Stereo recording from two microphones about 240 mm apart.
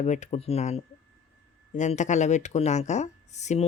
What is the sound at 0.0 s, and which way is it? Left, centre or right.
Speech, left.